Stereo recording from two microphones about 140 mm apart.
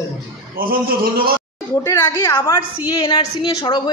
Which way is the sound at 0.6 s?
90° right.